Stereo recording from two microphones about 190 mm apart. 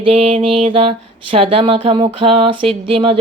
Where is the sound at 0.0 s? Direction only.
30° right (ahead or behind).